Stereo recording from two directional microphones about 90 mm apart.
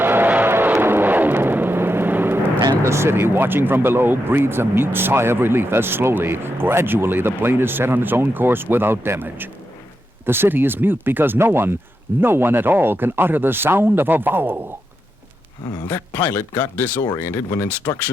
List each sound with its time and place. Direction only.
0.0 s vehicle: 25° right (ahead or behind)
2.8 s speech: 30° right (ahead or behind)
15.9 s speech: 20° left (ahead or behind)